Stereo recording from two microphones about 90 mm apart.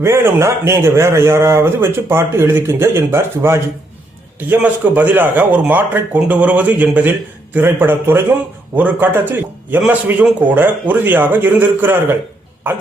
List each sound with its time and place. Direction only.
0.0 s a man's voice: 30° right (ahead or behind)